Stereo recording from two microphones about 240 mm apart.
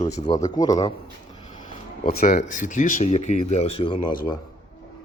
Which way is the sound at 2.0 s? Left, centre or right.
Left.